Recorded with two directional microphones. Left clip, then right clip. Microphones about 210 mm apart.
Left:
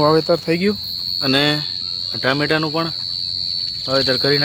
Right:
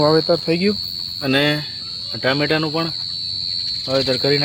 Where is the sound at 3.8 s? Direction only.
10° right (ahead or behind).